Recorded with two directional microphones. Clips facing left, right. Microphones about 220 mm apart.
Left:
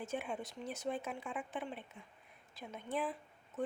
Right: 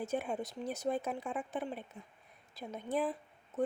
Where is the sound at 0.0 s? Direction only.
40° right (ahead or behind).